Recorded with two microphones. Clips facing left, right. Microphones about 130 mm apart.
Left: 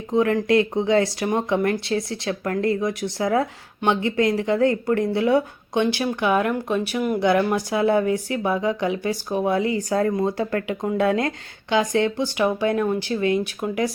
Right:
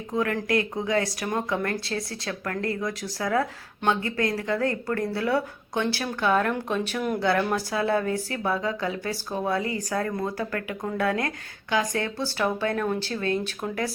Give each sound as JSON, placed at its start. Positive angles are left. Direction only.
{"t": 0.1, "sound": "speech", "side_deg": 20}